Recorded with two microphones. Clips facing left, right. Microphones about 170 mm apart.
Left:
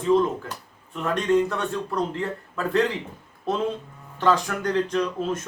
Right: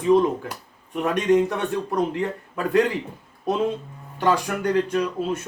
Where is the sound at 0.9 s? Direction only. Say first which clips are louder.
Right 2 dB; 15° right (ahead or behind).